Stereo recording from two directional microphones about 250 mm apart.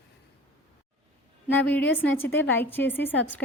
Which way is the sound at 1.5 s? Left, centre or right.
Centre.